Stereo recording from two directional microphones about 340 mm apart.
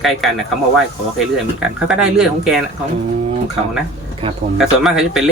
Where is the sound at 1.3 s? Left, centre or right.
Centre.